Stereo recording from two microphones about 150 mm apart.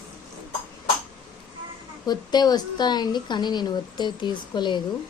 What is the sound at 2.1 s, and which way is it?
A woman's voice, 25° left (ahead or behind).